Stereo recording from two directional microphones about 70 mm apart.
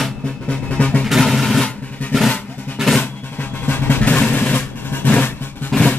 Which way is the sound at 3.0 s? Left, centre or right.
Left.